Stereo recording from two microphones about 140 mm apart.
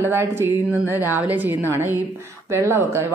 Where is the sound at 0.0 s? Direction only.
15° right (ahead or behind).